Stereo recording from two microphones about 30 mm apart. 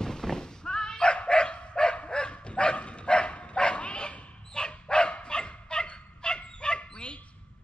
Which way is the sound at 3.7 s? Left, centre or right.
Left.